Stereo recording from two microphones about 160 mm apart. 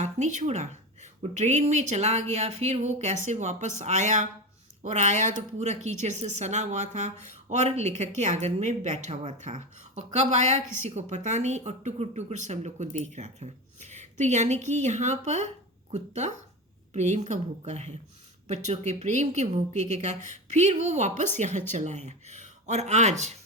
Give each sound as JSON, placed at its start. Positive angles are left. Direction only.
{"t": 0.0, "sound": "speech", "side_deg": -50}